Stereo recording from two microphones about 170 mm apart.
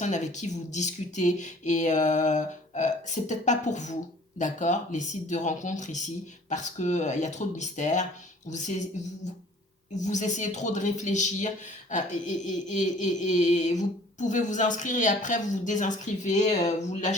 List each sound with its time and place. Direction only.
0.0 s speech: 45° left (ahead or behind)